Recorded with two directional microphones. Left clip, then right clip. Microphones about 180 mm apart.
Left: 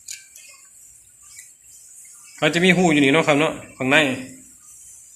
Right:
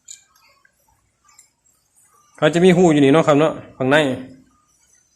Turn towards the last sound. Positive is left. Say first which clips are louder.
# right 1 dB
turn(degrees=-50)  # may be behind; listen again after turning